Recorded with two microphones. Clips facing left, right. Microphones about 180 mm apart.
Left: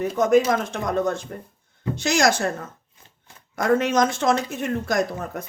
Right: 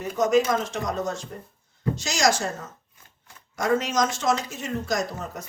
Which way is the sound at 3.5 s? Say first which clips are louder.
Left 4 dB; 55° left (ahead or behind).